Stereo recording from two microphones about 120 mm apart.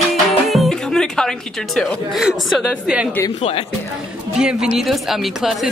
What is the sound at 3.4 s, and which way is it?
Speech, 55° left (ahead or behind).